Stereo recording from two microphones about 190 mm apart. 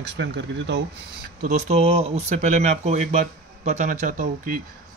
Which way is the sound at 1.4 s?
35° right (ahead or behind).